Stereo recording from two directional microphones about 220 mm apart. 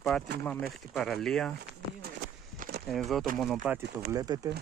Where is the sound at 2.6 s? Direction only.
45° right (ahead or behind).